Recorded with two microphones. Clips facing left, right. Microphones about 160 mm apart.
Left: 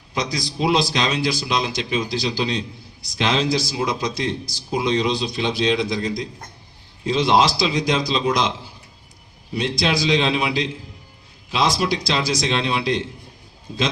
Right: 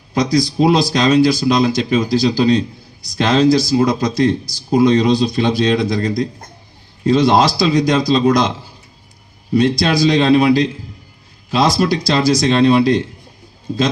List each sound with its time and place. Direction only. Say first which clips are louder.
0.1 s a man's voice: right 10 dB; 40° right (ahead or behind)